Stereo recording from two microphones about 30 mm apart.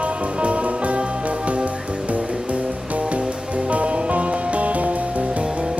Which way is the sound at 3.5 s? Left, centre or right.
Right.